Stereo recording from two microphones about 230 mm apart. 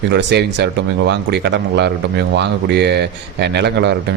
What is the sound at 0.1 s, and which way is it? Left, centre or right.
Speech, right.